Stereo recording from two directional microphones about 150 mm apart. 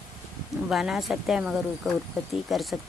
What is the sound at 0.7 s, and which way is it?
Speech, centre (ahead or behind).